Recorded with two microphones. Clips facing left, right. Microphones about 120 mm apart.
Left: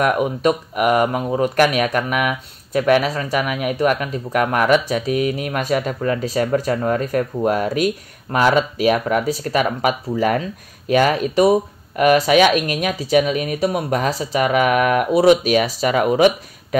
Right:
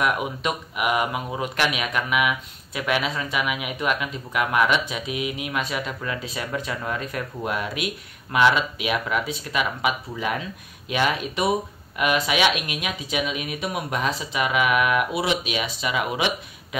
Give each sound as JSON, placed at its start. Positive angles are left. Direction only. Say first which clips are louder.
{"t": 0.0, "sound": "speech", "louder": "left 7 dB", "side_deg": 45}